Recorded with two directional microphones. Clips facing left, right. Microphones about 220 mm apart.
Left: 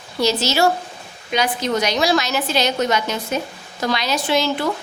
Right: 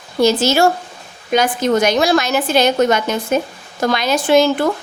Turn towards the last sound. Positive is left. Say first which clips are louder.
# right 7 dB
turn(degrees=-50)  # may be behind; listen again after turning